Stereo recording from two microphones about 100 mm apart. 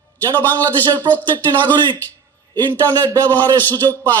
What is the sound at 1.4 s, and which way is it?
Speech, 20° left (ahead or behind).